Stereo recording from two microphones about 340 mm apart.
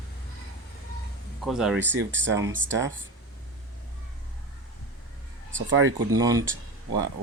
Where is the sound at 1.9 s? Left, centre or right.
Right.